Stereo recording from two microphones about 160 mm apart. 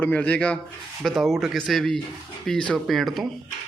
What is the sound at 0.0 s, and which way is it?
A man's voice, 10° left (ahead or behind).